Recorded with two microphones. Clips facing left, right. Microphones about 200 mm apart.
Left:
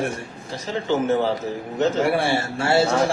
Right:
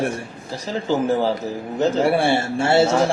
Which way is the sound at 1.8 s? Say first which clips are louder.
Right 2 dB; 30° right (ahead or behind).